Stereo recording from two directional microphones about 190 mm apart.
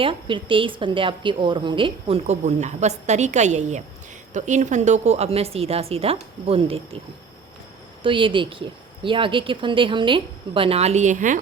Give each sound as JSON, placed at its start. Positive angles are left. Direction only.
{"t": 0.0, "sound": "a woman's voice", "side_deg": -25}
{"t": 8.0, "sound": "a woman's voice", "side_deg": -25}